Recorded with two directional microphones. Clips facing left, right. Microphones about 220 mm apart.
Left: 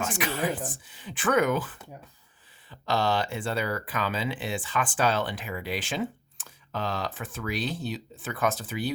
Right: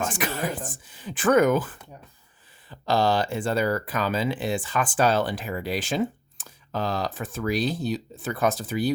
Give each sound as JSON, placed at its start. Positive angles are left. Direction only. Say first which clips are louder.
{"t": 0.1, "sound": "speech", "louder": "even", "side_deg": -45}